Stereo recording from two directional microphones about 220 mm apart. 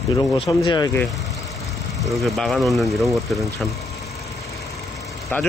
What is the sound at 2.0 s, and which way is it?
Speech, centre (ahead or behind).